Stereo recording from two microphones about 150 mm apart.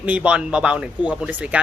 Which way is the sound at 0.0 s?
10° right (ahead or behind).